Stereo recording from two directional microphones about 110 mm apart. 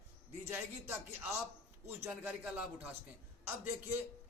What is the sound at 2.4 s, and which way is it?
Speech, 10° right (ahead or behind).